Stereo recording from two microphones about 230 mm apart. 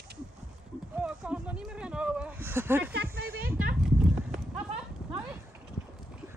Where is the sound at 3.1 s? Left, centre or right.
Right.